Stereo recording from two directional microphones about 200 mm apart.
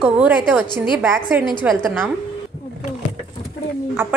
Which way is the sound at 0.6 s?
20° left (ahead or behind).